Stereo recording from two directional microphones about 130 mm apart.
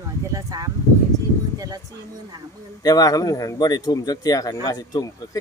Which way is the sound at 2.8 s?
30° left (ahead or behind).